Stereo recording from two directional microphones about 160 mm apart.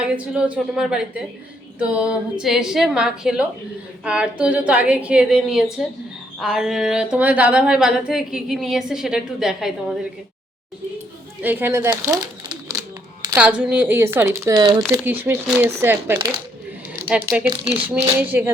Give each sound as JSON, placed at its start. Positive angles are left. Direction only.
{"t": 0.0, "sound": "a woman's voice", "side_deg": -5}
{"t": 11.4, "sound": "a woman's voice", "side_deg": -10}
{"t": 13.3, "sound": "a woman's voice", "side_deg": -10}
{"t": 14.9, "sound": "a woman's voice", "side_deg": -10}
{"t": 17.5, "sound": "speech", "side_deg": -35}
{"t": 18.2, "sound": "a woman's voice", "side_deg": -10}